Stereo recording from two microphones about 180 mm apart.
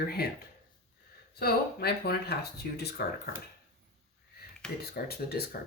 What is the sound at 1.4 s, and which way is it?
Speech, 60° left (ahead or behind).